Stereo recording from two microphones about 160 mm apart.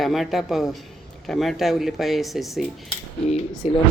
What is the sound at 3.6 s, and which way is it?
Speech, 40° left (ahead or behind).